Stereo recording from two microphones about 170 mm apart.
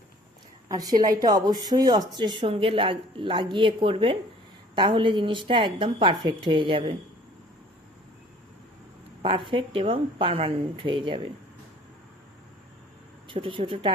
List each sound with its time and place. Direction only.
0.7 s speech: 20° right (ahead or behind)
9.2 s speech: 30° right (ahead or behind)
13.2 s speech: 30° right (ahead or behind)